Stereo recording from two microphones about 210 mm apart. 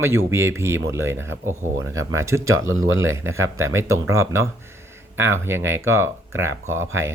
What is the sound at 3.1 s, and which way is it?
Speech, 15° right (ahead or behind).